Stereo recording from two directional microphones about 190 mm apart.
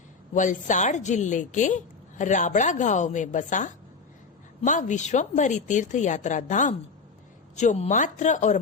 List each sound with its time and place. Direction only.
0.3 s a woman's voice: 40° left (ahead or behind)